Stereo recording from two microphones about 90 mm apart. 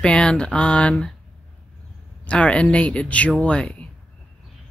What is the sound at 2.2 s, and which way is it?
Speech, 15° left (ahead or behind).